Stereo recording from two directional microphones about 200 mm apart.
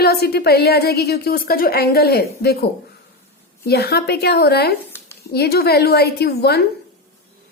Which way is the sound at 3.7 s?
55° left (ahead or behind).